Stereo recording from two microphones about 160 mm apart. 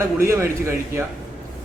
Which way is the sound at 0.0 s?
15° right (ahead or behind).